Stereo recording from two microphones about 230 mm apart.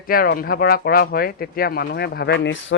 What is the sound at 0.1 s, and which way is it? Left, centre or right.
Speech, left.